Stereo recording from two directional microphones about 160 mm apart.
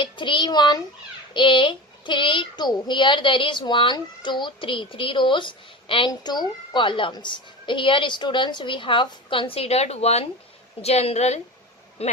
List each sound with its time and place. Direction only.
0.0 s a child's voice: 30° left (ahead or behind)